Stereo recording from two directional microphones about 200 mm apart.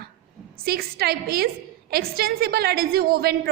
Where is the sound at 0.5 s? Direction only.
50° right (ahead or behind).